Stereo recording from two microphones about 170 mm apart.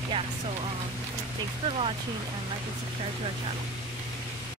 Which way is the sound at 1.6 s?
35° right (ahead or behind).